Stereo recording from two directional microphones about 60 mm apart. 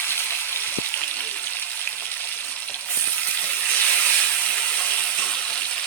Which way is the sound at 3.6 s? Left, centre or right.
Left.